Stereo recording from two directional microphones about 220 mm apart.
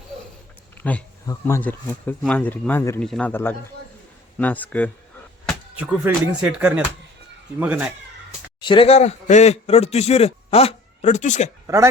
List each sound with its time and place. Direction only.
0.8 s speech: 10° left (ahead or behind)
6.0 s speech: 10° right (ahead or behind)
8.6 s a man's voice: 25° left (ahead or behind)
11.6 s speech: 15° right (ahead or behind)